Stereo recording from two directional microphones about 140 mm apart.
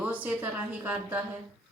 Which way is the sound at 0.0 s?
10° right (ahead or behind).